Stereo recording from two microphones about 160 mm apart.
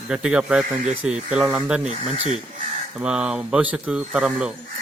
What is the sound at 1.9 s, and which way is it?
Speech, 45° right (ahead or behind).